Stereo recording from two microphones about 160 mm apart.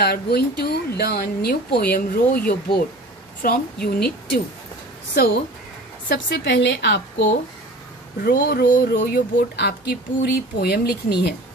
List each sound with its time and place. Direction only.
0.0 s speech: 80° left
5.1 s a woman's voice: 85° left
8.2 s speech: 75° left (ahead or behind)